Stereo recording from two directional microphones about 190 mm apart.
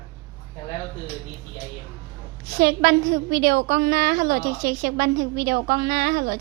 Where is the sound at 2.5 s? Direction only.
55° right (ahead or behind).